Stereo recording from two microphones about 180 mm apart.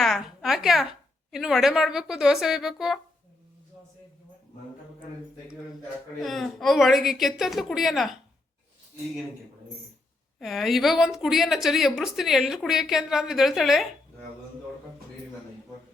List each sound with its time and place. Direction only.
0.0 s a woman's voice: centre (ahead or behind)
6.2 s a woman's voice: centre (ahead or behind)
10.4 s a woman's voice: centre (ahead or behind)